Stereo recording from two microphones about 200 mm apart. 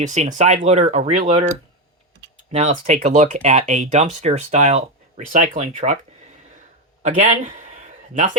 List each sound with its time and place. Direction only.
0.0 s speech: 35° right (ahead or behind)
2.5 s speech: 35° right (ahead or behind)
7.0 s speech: 40° right (ahead or behind)